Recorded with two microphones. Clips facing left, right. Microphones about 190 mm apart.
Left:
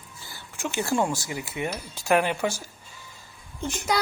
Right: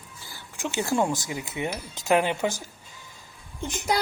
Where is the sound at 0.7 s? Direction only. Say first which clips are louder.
Right 1 dB; 15° right (ahead or behind).